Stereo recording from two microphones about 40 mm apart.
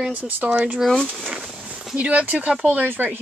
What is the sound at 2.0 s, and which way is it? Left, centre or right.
Speech, right.